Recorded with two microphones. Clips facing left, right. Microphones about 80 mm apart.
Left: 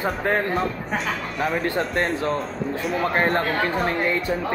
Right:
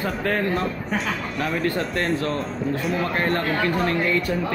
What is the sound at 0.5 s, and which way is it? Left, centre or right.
Speech, centre.